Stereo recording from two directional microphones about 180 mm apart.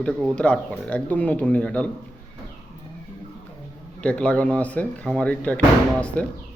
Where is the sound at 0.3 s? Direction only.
5° left (ahead or behind).